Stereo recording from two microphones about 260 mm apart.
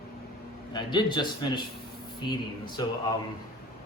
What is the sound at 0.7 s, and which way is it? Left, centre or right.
Speech, centre.